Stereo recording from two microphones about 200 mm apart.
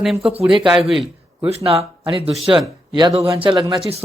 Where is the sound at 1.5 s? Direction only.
30° right (ahead or behind).